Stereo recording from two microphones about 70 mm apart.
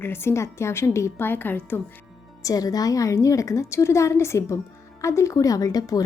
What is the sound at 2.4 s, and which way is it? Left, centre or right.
A woman's voice, left.